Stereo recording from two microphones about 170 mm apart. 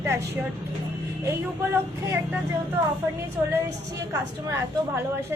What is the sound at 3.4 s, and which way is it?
A woman's voice, 20° right (ahead or behind).